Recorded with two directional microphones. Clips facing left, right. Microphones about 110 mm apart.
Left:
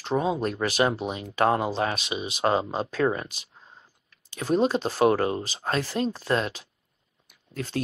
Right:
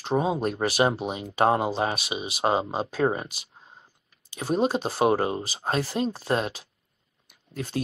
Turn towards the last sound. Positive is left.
turn(degrees=-20)  # may be behind; listen again after turning